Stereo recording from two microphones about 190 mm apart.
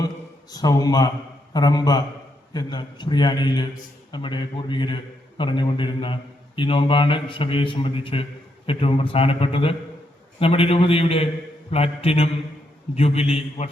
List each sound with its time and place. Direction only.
0.5 s a man's voice: 20° left (ahead or behind)